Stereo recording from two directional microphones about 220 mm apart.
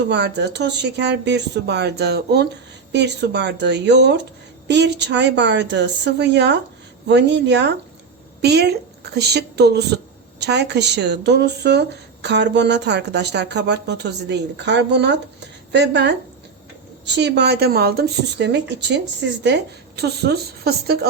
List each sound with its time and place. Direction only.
0.1 s speech: 50° right (ahead or behind)